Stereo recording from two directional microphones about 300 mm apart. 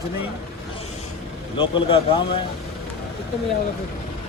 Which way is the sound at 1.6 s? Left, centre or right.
Centre.